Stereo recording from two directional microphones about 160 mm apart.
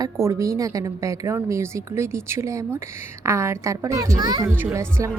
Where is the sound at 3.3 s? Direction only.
15° right (ahead or behind).